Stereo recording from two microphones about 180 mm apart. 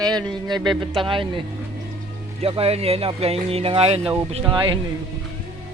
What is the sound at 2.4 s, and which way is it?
Speech, 35° right (ahead or behind).